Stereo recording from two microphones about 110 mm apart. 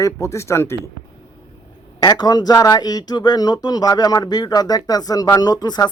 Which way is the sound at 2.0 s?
35° left (ahead or behind).